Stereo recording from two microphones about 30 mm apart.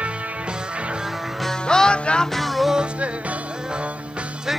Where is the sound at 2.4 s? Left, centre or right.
Centre.